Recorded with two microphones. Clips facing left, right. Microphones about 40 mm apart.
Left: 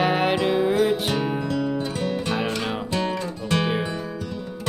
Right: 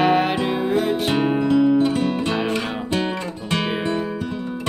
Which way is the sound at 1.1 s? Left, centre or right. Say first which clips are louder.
Right 6 dB; right.